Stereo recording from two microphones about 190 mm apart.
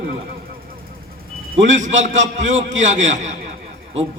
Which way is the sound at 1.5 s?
40° right (ahead or behind).